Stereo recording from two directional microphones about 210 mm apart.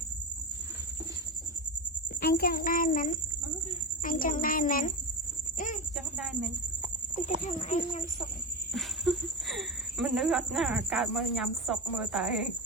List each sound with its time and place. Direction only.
2.2 s a child's voice: 45° left (ahead or behind)
5.5 s a sound: 40° left (ahead or behind)
6.1 s speech: centre (ahead or behind)
7.4 s a child's voice: 35° left (ahead or behind)
8.7 s speech: centre (ahead or behind)